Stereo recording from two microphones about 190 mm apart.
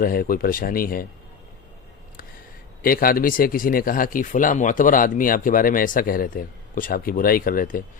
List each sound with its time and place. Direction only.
0.0 s speech: 50° left (ahead or behind)
2.8 s speech: 50° left (ahead or behind)